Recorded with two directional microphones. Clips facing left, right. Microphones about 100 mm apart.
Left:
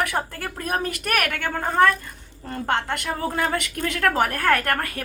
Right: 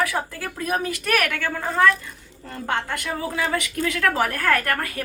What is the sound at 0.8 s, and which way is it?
A woman's voice, 50° left (ahead or behind).